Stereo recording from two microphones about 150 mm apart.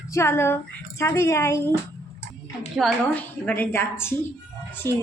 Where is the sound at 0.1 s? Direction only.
15° left (ahead or behind).